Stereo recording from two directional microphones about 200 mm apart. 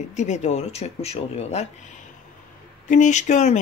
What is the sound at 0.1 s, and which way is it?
Speech, 35° left (ahead or behind).